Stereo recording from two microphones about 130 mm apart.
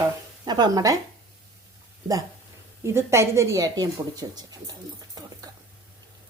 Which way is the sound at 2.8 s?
20° right (ahead or behind).